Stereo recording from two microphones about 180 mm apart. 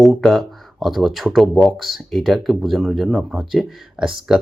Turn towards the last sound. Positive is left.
turn(degrees=-5)  # may be behind; listen again after turning